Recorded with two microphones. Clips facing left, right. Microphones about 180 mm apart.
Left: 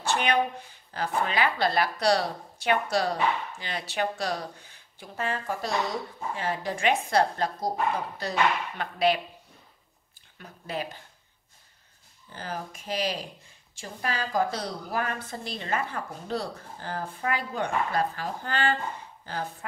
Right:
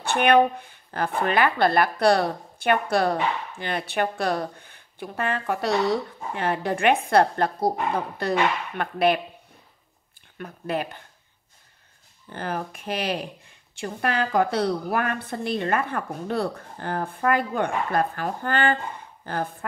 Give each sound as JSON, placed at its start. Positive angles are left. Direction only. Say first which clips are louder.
{"t": 0.0, "sound": "speech", "louder": "right 7 dB", "side_deg": -55}
{"t": 10.3, "sound": "speech", "louder": "right 6 dB", "side_deg": -60}
{"t": 12.3, "sound": "a woman's voice", "louder": "right 6 dB", "side_deg": -60}